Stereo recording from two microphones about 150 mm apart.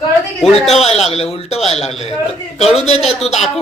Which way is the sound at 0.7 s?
45° left (ahead or behind).